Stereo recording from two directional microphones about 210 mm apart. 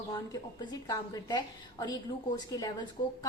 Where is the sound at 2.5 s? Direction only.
15° left (ahead or behind).